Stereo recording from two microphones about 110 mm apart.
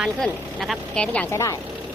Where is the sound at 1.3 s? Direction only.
25° left (ahead or behind).